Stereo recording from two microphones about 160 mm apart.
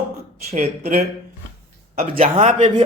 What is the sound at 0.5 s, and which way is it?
Speech, 50° right (ahead or behind).